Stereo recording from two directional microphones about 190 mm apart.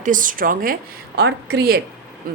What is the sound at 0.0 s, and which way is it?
A woman's voice, 45° right (ahead or behind).